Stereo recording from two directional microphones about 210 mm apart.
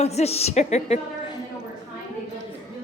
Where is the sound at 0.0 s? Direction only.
30° left (ahead or behind).